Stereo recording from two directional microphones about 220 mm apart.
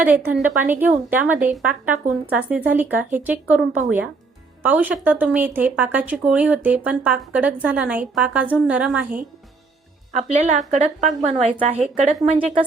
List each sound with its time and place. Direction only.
0.0 s a woman's voice: 5° right (ahead or behind)
10.1 s a woman's voice: 30° right (ahead or behind)